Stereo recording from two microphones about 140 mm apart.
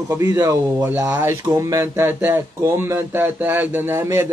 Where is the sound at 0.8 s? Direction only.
15° right (ahead or behind).